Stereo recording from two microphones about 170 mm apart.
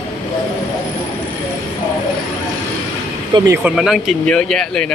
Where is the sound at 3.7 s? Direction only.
Centre (ahead or behind).